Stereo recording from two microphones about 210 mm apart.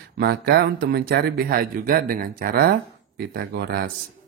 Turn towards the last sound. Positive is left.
turn(degrees=-50)  # may be behind; listen again after turning